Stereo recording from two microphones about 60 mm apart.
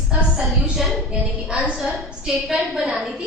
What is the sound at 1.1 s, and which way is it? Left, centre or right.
Speech, centre.